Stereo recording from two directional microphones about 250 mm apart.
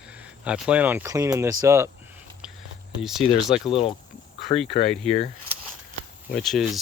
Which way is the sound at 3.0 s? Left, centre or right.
Centre.